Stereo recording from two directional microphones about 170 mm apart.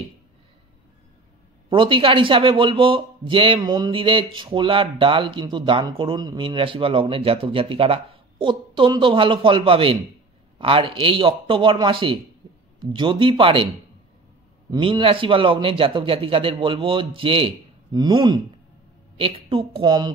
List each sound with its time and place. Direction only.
1.7 s a man's voice: 30° right (ahead or behind)
14.7 s a man's voice: 30° right (ahead or behind)